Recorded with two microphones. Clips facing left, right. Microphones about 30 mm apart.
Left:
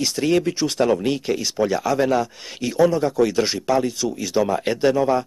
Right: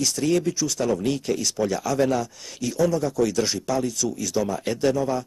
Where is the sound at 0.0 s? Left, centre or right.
Left.